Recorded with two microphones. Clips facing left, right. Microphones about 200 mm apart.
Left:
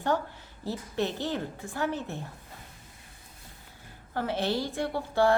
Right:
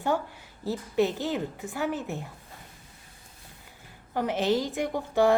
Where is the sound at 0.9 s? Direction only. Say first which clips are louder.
Right 5 dB; 15° right (ahead or behind).